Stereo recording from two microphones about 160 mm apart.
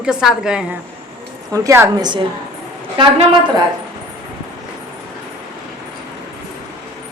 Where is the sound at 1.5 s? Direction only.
20° right (ahead or behind).